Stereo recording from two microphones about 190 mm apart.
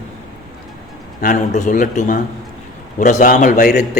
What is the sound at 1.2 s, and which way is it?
A man's voice, 45° left (ahead or behind).